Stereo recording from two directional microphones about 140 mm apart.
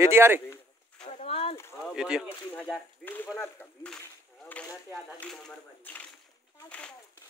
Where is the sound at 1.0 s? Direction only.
45° left (ahead or behind).